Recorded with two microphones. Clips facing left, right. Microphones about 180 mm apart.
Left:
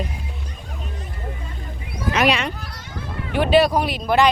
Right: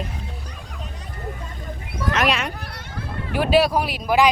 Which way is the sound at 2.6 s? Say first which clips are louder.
Right 1 dB; 60° right (ahead or behind).